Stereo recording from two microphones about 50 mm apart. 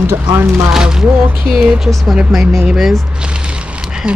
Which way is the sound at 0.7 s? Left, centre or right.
Centre.